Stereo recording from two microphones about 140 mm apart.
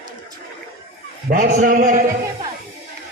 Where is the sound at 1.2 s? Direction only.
65° right (ahead or behind).